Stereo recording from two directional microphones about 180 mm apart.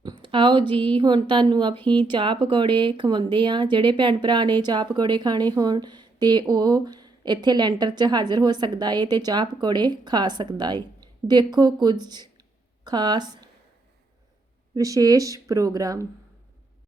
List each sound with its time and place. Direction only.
0.0 s a sound: 25° right (ahead or behind)
0.7 s speech: 25° right (ahead or behind)
1.7 s speech: 10° left (ahead or behind)
2.0 s speech: 25° right (ahead or behind)
14.8 s speech: 20° right (ahead or behind)